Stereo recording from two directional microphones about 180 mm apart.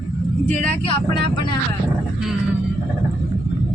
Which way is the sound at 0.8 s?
30° left (ahead or behind).